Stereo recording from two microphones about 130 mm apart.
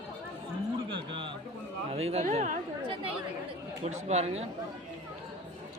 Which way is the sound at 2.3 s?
65° right (ahead or behind).